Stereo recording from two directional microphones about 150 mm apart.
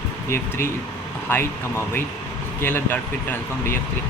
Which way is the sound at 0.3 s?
15° left (ahead or behind).